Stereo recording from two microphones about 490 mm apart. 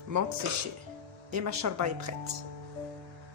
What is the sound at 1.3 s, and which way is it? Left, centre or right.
Speech, right.